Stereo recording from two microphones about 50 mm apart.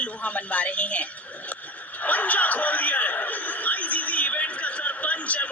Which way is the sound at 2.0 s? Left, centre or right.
Left.